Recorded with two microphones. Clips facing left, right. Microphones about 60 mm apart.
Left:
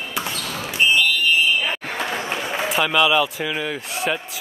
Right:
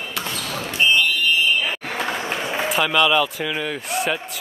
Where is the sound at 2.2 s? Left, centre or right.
Centre.